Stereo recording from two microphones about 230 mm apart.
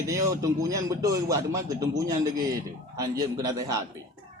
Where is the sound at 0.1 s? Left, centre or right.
Centre.